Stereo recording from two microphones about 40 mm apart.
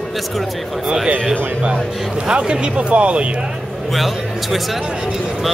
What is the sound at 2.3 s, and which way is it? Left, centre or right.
Speech, right.